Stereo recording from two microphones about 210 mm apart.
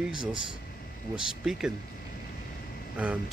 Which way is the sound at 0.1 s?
20° right (ahead or behind).